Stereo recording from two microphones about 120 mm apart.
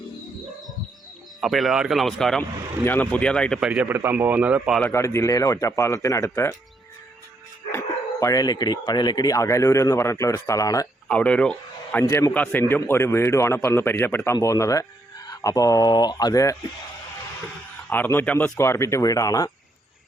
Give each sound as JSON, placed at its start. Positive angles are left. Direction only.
{"t": 1.4, "sound": "speech", "side_deg": 0}
{"t": 2.8, "sound": "speech", "side_deg": 15}
{"t": 3.6, "sound": "a man's voice", "side_deg": -10}
{"t": 4.8, "sound": "speech", "side_deg": 20}
{"t": 7.7, "sound": "speech", "side_deg": 25}
{"t": 11.1, "sound": "speech", "side_deg": 10}
{"t": 12.0, "sound": "speech", "side_deg": 30}
{"t": 12.3, "sound": "speech", "side_deg": 15}
{"t": 14.3, "sound": "speech", "side_deg": 25}
{"t": 17.8, "sound": "speech", "side_deg": 15}
{"t": 18.5, "sound": "speech", "side_deg": 25}